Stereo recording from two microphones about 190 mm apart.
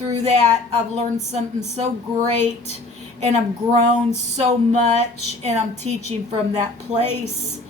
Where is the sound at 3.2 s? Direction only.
35° right (ahead or behind).